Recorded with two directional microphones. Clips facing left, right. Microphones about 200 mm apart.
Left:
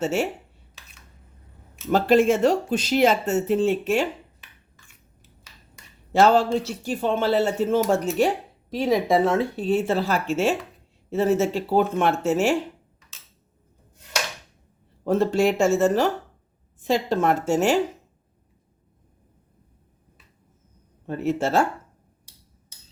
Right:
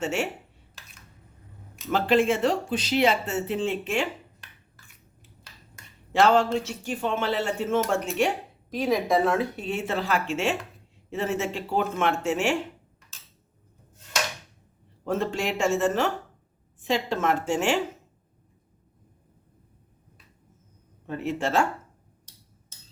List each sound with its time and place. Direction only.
0.0 s speech: 35° left (ahead or behind)
1.9 s speech: 45° left (ahead or behind)
6.1 s speech: 40° left (ahead or behind)
15.0 s speech: 35° left (ahead or behind)
21.1 s speech: 40° left (ahead or behind)